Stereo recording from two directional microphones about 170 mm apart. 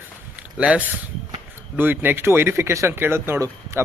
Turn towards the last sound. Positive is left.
turn(degrees=-15)  # may be behind; listen again after turning